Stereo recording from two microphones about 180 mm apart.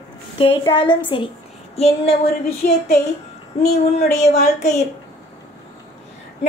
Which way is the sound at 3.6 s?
40° left (ahead or behind).